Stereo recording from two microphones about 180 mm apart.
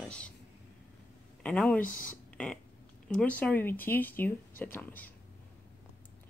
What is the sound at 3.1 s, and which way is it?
Speech, 5° left (ahead or behind).